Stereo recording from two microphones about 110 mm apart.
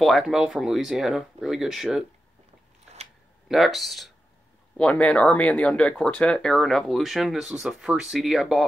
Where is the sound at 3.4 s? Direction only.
Centre (ahead or behind).